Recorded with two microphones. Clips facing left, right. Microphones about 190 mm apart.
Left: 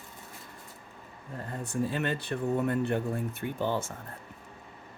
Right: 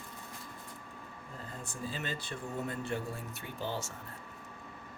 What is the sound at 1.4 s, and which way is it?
Speech, 65° left (ahead or behind).